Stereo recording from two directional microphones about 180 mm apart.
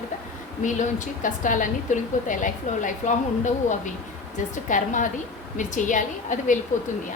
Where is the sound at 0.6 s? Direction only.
45° left (ahead or behind).